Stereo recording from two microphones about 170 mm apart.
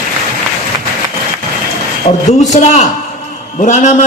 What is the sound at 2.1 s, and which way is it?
A man's voice, 40° left (ahead or behind).